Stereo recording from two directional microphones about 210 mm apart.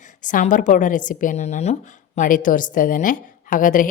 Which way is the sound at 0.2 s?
40° left (ahead or behind).